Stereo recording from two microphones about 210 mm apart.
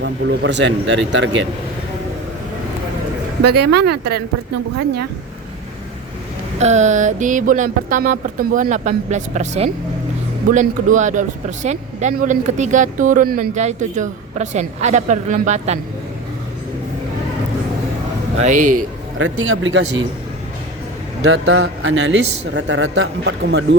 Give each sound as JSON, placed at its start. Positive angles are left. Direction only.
{"t": 0.0, "sound": "speech", "side_deg": -55}
{"t": 3.5, "sound": "speech", "side_deg": -50}
{"t": 6.6, "sound": "speech", "side_deg": -35}
{"t": 18.3, "sound": "speech", "side_deg": -35}
{"t": 18.8, "sound": "a man's voice", "side_deg": -65}
{"t": 21.2, "sound": "speech", "side_deg": -65}